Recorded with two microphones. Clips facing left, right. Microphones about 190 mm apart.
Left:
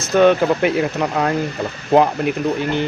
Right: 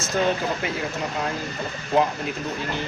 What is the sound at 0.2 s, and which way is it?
Speech, 70° left (ahead or behind).